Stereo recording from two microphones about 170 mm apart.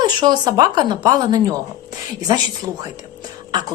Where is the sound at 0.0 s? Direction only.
25° right (ahead or behind).